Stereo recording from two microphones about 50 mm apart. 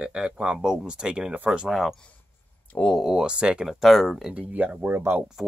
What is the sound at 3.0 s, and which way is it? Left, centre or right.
Speech, centre.